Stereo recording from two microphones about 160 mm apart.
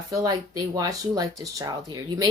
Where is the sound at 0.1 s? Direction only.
20° right (ahead or behind).